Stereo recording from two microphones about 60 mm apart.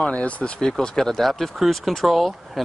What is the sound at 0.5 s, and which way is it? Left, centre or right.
Speech, centre.